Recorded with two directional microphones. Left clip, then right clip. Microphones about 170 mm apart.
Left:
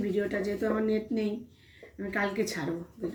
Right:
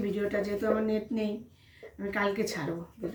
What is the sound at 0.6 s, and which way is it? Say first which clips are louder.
A woman's voice: left 1 dB; 20° right (ahead or behind).